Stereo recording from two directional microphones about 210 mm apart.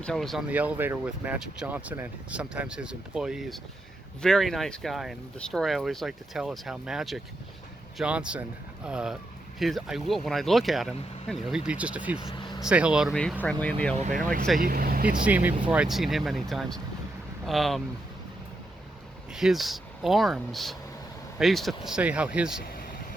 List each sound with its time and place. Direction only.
0.0 s speech: centre (ahead or behind)
13.9 s speech: 35° right (ahead or behind)
14.6 s speech: 45° right (ahead or behind)
15.2 s speech: 10° right (ahead or behind)
19.3 s speech: centre (ahead or behind)